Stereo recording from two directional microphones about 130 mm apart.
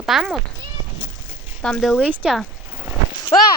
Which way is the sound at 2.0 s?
10° right (ahead or behind).